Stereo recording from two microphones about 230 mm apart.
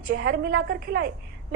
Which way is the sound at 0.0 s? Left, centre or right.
Right.